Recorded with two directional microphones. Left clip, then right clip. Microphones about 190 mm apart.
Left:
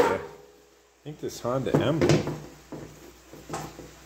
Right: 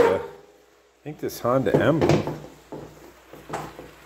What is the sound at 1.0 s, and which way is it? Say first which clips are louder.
Speech: right 6 dB; 40° right (ahead or behind).